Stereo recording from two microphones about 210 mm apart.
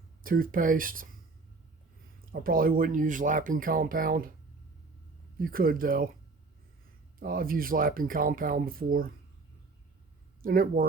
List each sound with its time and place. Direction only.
0.2 s speech: 40° right (ahead or behind)
2.2 s speech: 45° right (ahead or behind)
5.4 s speech: 45° right (ahead or behind)
7.2 s speech: 45° right (ahead or behind)
10.4 s speech: 45° right (ahead or behind)